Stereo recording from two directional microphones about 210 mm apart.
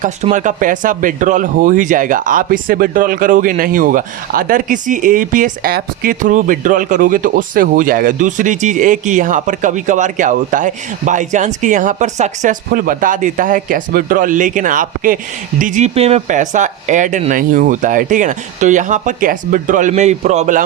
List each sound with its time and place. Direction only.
0.0 s speech: 35° right (ahead or behind)